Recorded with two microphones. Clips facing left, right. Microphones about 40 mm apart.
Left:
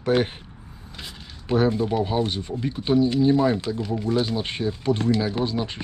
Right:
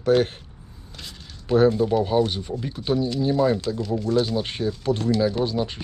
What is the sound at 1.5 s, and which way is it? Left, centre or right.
Speech, centre.